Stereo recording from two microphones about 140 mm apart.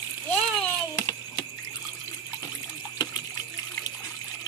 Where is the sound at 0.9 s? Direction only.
25° left (ahead or behind).